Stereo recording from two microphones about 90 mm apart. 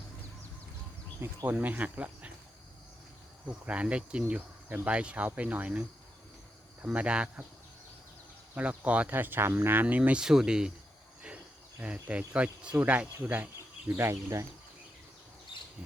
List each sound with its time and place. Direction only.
1.5 s speech: 20° right (ahead or behind)
3.4 s speech: 15° right (ahead or behind)
6.9 s speech: 15° right (ahead or behind)
8.5 s speech: 15° right (ahead or behind)
11.8 s speech: 15° right (ahead or behind); by 14.4 s 30° right (ahead or behind)